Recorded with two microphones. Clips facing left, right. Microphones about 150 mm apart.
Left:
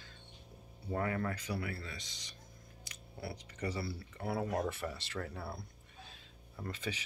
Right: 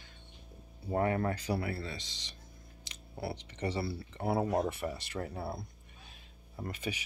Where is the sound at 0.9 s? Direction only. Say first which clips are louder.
Right 5 dB; 30° right (ahead or behind).